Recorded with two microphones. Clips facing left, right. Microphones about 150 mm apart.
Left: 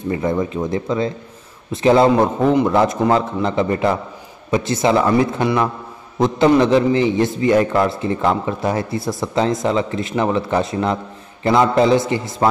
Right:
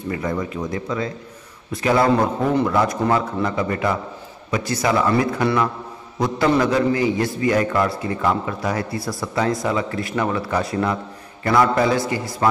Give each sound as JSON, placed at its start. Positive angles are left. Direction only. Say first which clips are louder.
{"t": 0.1, "sound": "a man's voice", "louder": "left 5 dB", "side_deg": 25}